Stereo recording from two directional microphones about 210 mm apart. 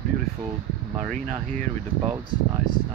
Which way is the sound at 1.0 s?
5° left (ahead or behind).